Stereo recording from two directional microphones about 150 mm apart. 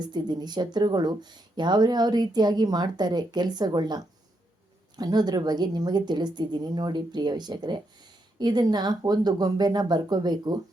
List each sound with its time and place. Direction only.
0.1 s speech: 30° right (ahead or behind)